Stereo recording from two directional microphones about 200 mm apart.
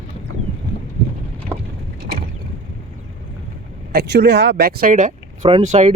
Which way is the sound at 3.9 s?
55° right (ahead or behind).